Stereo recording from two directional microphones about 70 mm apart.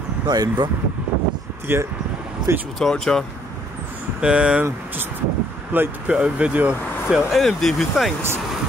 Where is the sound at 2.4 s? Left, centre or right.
Right.